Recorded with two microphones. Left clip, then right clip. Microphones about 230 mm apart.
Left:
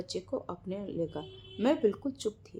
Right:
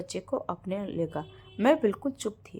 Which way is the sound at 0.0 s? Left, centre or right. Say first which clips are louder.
Right 4 dB; right.